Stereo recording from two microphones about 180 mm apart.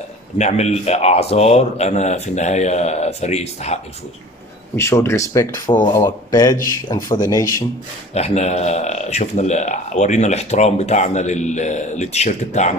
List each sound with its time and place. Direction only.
0.4 s speech: 40° left (ahead or behind)
4.7 s speech: 15° left (ahead or behind)
8.1 s speech: 35° left (ahead or behind)